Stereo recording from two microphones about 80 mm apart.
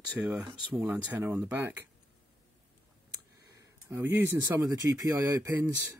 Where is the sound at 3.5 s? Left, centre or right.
Right.